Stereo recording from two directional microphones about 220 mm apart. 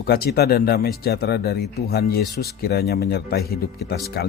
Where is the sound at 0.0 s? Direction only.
45° left (ahead or behind).